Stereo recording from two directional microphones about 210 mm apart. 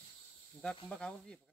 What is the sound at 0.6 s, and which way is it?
Speech, 5° left (ahead or behind).